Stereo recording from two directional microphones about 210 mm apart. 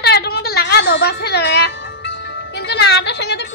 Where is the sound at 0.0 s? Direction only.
50° left (ahead or behind).